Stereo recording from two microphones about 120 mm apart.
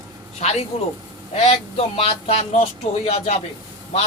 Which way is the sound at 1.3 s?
55° left (ahead or behind).